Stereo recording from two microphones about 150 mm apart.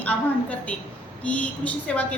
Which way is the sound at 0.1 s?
5° left (ahead or behind).